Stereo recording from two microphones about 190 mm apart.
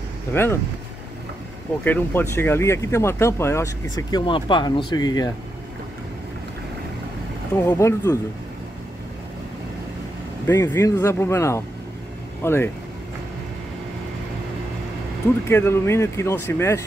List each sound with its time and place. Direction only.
0.3 s speech: 10° left (ahead or behind)
1.9 s speech: 10° left (ahead or behind)
7.5 s speech: 15° left (ahead or behind)
10.4 s speech: 15° left (ahead or behind)
15.4 s speech: 10° left (ahead or behind)